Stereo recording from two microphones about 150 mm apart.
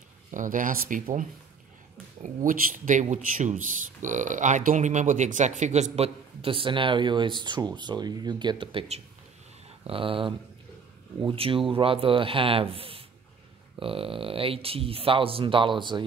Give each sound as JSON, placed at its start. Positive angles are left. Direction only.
{"t": 0.3, "sound": "speech", "side_deg": -60}
{"t": 2.2, "sound": "speech", "side_deg": -60}
{"t": 9.8, "sound": "speech", "side_deg": -35}